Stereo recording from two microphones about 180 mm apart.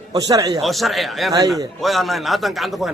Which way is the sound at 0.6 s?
Centre (ahead or behind).